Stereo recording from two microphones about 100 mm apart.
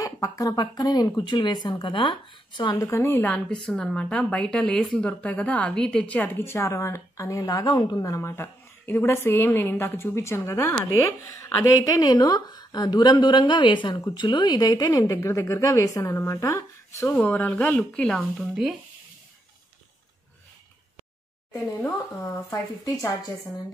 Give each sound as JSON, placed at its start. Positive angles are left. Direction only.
{"t": 0.0, "sound": "speech", "side_deg": 40}
{"t": 2.7, "sound": "speech", "side_deg": 30}
{"t": 21.5, "sound": "speech", "side_deg": 30}